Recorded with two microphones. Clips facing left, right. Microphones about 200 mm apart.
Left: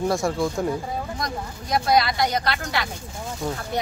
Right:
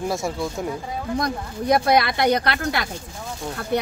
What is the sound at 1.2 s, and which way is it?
Speech, 60° right (ahead or behind).